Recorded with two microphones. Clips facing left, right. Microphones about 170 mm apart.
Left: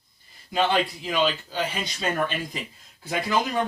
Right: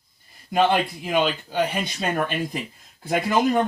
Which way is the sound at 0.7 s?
55° right (ahead or behind).